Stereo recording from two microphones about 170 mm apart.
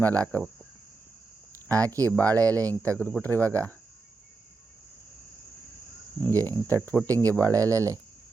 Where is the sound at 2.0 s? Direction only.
10° left (ahead or behind).